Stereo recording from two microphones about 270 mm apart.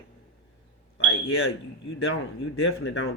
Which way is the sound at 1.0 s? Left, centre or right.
Left.